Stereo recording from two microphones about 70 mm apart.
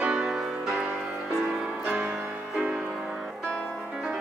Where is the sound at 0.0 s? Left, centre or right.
Centre.